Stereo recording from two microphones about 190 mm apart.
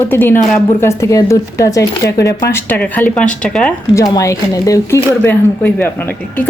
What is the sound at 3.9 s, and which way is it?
Child singing, 15° left (ahead or behind).